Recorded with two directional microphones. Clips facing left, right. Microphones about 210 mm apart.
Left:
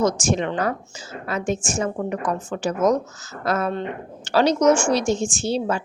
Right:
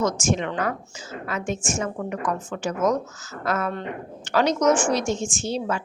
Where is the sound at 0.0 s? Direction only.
35° left (ahead or behind).